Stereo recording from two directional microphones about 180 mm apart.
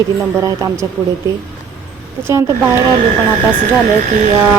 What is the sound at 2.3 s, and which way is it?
Speech, 15° right (ahead or behind).